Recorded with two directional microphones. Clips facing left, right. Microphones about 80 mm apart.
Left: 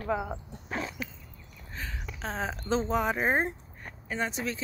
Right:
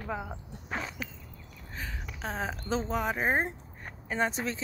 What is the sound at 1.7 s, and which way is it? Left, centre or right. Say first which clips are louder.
Speech: left 1 dB; centre.